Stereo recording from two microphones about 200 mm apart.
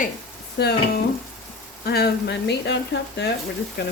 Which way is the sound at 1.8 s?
50° left (ahead or behind).